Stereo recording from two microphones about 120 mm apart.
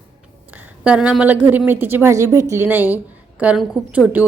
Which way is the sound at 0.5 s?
10° right (ahead or behind).